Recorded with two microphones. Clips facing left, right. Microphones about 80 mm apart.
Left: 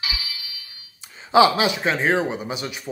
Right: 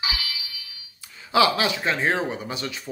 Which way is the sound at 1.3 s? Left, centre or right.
Left.